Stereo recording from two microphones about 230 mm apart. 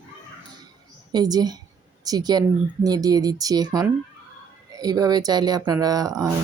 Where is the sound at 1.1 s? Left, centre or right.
Centre.